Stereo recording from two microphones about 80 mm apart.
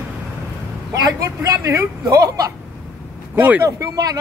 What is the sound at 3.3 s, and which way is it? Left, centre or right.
Speech, right.